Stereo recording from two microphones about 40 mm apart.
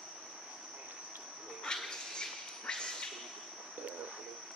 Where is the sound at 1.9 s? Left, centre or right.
Left.